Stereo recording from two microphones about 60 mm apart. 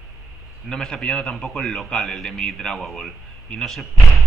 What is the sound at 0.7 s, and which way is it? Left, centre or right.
A man's voice, centre.